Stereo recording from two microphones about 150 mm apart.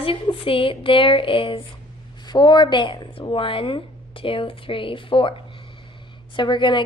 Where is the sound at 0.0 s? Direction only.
35° left (ahead or behind).